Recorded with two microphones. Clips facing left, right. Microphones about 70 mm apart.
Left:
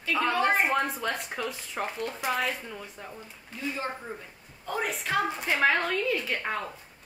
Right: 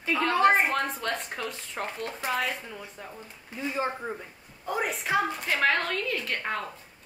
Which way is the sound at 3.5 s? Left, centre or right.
Centre.